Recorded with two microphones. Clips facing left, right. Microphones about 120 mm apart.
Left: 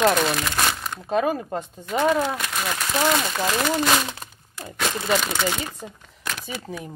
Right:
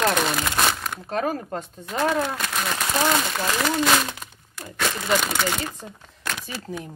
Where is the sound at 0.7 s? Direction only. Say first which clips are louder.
Even; 5° left (ahead or behind).